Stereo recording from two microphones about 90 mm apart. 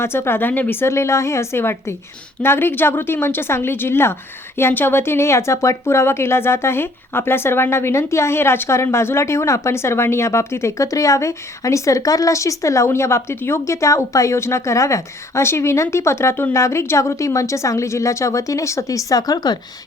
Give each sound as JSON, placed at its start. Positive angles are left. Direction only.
{"t": 0.0, "sound": "speech", "side_deg": 25}